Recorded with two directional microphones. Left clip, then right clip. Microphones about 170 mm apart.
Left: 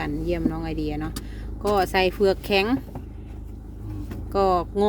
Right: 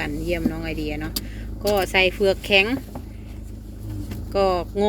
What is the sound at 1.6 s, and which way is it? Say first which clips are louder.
Speech: right 2 dB; 40° left (ahead or behind).